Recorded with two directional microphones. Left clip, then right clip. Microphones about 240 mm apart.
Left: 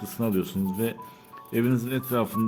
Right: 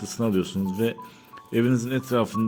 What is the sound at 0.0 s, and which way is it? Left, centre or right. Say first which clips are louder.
A man's voice: right 3 dB; centre.